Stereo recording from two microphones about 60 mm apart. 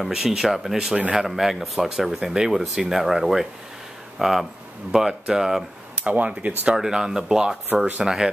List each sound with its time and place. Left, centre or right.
0.0 s speech: centre
0.9 s speech: right
1.2 s speech: centre
6.0 s speech: right
6.7 s speech: centre